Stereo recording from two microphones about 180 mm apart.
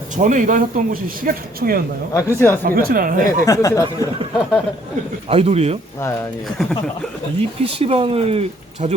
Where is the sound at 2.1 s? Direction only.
15° left (ahead or behind).